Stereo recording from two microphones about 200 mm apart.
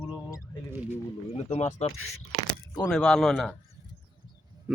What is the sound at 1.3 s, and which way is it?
Speech, 30° left (ahead or behind).